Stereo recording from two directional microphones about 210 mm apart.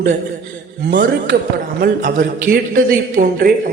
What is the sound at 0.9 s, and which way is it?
Speech, 55° right (ahead or behind).